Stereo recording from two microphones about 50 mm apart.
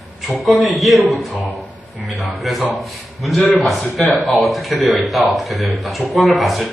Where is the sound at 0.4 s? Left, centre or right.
Centre.